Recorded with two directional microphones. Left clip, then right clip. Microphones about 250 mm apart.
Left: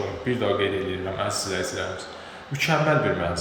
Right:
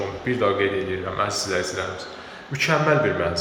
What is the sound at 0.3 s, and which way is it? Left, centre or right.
Speech, centre.